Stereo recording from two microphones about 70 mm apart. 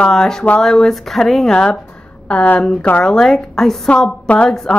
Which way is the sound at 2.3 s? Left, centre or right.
Centre.